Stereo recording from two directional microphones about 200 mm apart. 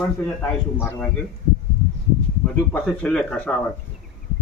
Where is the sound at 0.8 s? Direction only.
10° left (ahead or behind).